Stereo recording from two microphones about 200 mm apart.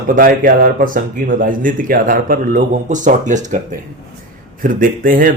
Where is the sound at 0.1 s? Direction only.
45° right (ahead or behind).